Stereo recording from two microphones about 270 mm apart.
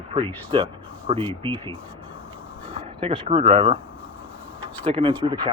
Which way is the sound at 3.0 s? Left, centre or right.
Right.